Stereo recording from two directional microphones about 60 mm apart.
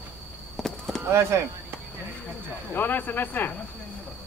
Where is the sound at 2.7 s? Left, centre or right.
Left.